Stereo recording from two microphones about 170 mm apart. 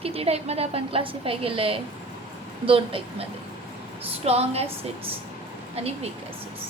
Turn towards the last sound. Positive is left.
turn(degrees=-40)  # may be behind; listen again after turning